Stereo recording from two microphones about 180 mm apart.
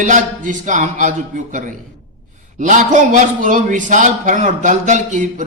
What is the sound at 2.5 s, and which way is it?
A man's voice, 45° right (ahead or behind).